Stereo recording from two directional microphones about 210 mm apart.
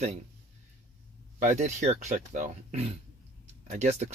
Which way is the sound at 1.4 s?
35° right (ahead or behind).